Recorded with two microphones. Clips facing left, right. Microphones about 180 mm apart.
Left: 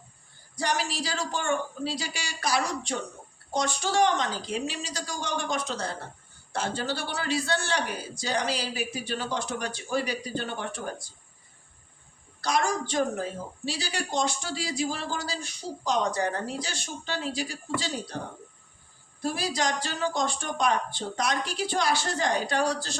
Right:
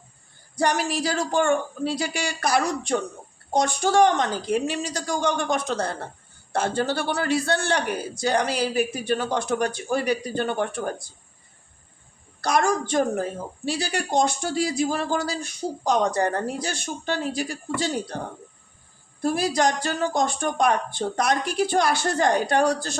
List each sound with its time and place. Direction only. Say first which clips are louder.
0.6 s a woman's voice: right 6 dB; 55° right (ahead or behind)
12.4 s a woman's voice: right 5 dB; 55° right (ahead or behind)
19.2 s a woman's voice: right 7 dB; 50° right (ahead or behind)